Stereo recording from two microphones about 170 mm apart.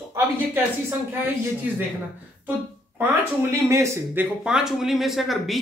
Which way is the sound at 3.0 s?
15° right (ahead or behind).